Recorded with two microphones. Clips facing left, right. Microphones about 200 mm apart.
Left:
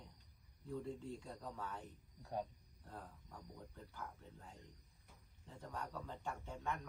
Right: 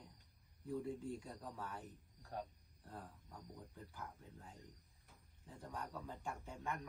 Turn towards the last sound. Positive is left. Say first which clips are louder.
# left 1 dB
turn(degrees=-10)  # may be behind; listen again after turning